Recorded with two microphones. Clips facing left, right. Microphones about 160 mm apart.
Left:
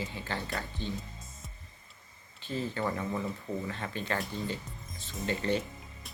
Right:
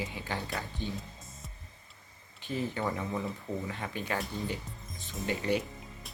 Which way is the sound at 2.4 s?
15° right (ahead or behind).